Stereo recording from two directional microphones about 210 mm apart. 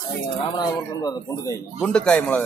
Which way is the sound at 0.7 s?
20° left (ahead or behind).